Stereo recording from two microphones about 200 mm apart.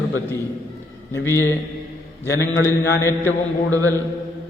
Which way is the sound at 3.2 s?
15° right (ahead or behind).